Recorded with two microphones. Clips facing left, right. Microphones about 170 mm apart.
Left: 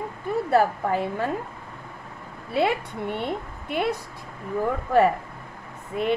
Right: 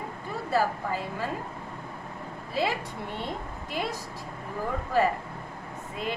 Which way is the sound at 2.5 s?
60° left (ahead or behind).